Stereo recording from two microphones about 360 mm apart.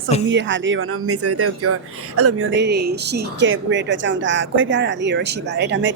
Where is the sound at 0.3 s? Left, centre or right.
Right.